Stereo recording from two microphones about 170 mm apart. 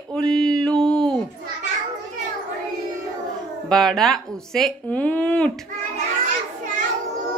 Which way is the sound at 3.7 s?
Centre (ahead or behind).